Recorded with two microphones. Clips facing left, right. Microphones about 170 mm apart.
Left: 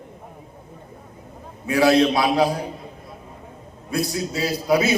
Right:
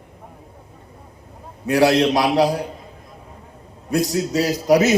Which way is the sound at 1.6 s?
85° right.